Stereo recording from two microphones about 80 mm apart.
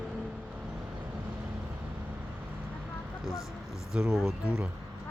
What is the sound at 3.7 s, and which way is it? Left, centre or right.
Music, centre.